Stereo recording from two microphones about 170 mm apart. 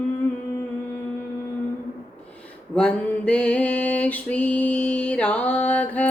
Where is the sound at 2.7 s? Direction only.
5° left (ahead or behind).